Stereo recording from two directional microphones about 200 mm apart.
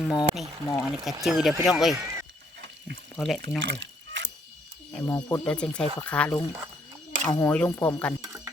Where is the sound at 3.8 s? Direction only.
65° right (ahead or behind).